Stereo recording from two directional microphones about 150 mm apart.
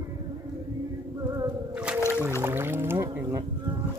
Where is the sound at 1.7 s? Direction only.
10° right (ahead or behind).